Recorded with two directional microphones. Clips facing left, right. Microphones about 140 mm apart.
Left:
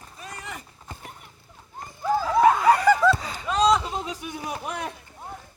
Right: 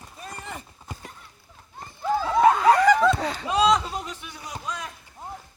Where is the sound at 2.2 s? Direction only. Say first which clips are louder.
Even; 10° left (ahead or behind).